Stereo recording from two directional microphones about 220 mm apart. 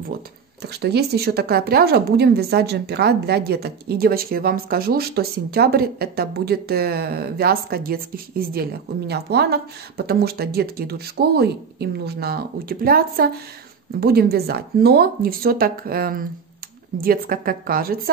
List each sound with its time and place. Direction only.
0.6 s a woman's voice: 50° right (ahead or behind)